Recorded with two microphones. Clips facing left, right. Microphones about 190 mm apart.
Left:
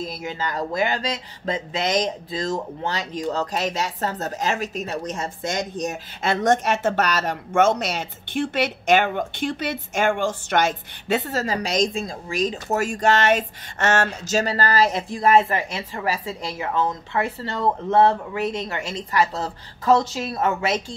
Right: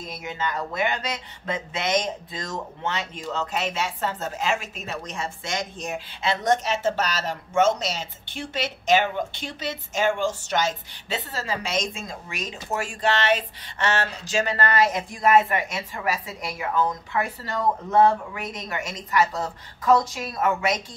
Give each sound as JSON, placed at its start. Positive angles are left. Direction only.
{"t": 0.0, "sound": "speech", "side_deg": 35}